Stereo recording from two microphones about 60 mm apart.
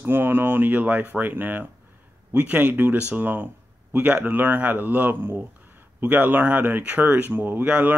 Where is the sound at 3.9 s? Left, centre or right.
Right.